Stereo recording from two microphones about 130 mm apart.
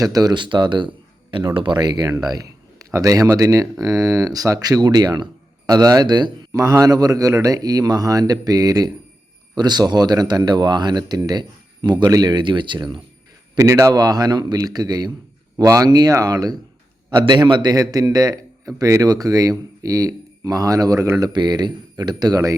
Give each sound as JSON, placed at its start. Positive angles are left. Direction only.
{"t": 0.0, "sound": "speech", "side_deg": -30}
{"t": 13.6, "sound": "speech", "side_deg": -25}